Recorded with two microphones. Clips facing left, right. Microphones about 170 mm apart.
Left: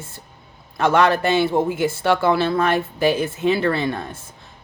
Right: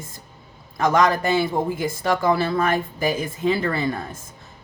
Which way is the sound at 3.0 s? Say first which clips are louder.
Left 5 dB; 80° left.